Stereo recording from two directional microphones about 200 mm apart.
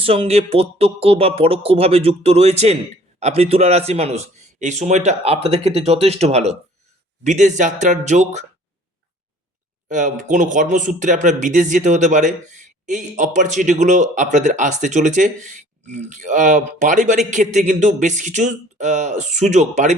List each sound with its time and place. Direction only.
0.0 s speech: 30° right (ahead or behind)
9.9 s speech: 40° right (ahead or behind)